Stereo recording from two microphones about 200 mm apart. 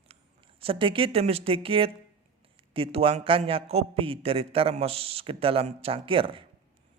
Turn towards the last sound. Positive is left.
turn(degrees=-25)  # may be behind; listen again after turning